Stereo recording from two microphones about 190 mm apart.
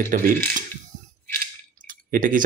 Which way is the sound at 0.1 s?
50° right (ahead or behind).